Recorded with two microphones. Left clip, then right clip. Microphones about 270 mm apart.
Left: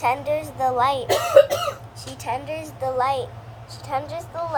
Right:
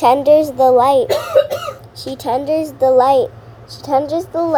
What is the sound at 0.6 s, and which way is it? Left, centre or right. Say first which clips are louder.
Speech: right 10 dB; right.